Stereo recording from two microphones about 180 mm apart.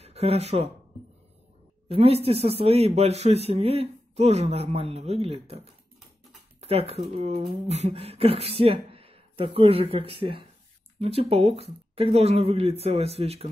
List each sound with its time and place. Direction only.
0.0 s speech: 35° right (ahead or behind)
1.9 s speech: 35° right (ahead or behind)
6.6 s speech: 35° right (ahead or behind)